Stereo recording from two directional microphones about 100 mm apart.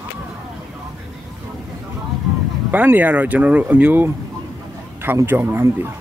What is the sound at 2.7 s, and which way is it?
A man's voice, 15° right (ahead or behind).